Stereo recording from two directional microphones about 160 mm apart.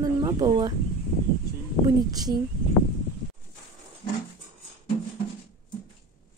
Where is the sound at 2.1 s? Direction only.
25° right (ahead or behind).